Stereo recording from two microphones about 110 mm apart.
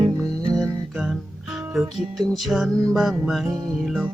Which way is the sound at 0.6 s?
Centre (ahead or behind).